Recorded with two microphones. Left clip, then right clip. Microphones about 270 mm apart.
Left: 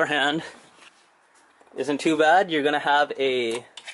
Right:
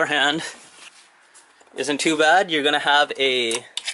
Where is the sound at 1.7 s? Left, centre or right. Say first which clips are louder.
Right 2 dB; centre.